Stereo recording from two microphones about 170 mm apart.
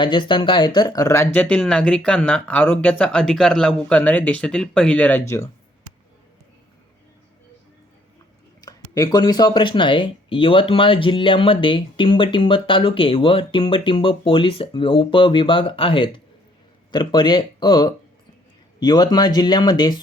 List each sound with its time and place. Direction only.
0.0 s speech: 25° left (ahead or behind)
8.6 s speech: 20° left (ahead or behind)